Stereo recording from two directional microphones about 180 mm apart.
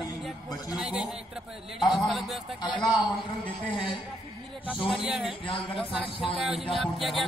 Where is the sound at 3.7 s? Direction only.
30° left (ahead or behind).